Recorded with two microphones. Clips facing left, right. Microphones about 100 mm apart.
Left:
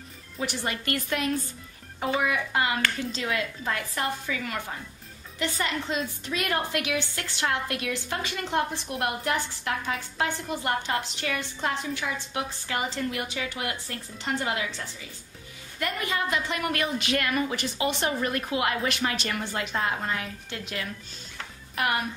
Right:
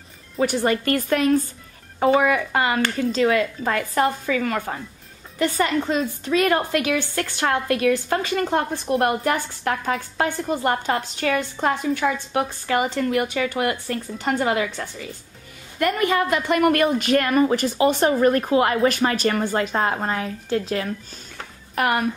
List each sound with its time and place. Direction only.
0.4 s a woman's voice: 45° right (ahead or behind)
2.2 s a woman's voice: 60° right (ahead or behind)
12.6 s a woman's voice: 65° right (ahead or behind); by 20.9 s 35° right (ahead or behind)
21.7 s a woman's voice: 50° right (ahead or behind)